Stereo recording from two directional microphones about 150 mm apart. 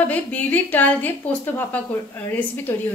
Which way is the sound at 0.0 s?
10° left (ahead or behind).